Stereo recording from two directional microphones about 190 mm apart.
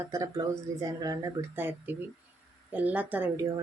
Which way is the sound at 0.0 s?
15° right (ahead or behind).